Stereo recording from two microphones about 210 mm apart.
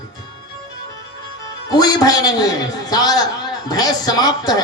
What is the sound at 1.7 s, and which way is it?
A man's voice, 20° left (ahead or behind).